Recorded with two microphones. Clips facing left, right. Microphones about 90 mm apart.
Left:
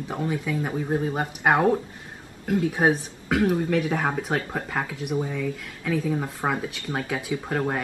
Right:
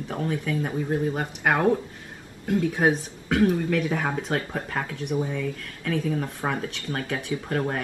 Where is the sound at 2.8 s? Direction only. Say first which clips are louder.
Left 1 dB; 10° left (ahead or behind).